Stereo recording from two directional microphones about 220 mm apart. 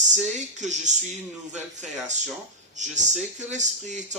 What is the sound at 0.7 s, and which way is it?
A man's voice, 35° right (ahead or behind).